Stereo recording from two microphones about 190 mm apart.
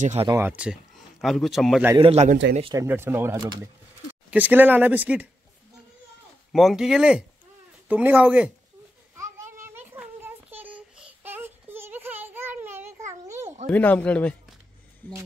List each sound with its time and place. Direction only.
0.0 s a man's voice: 35° right (ahead or behind)
0.3 s speech: 10° right (ahead or behind)
2.0 s a man's voice: 30° right (ahead or behind)
2.7 s speech: 15° right (ahead or behind)
6.5 s speech: centre (ahead or behind)
9.1 s a sound: 15° right (ahead or behind)
13.7 s speech: 10° left (ahead or behind)